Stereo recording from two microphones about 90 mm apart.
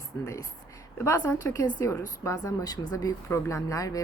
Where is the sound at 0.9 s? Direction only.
30° left (ahead or behind).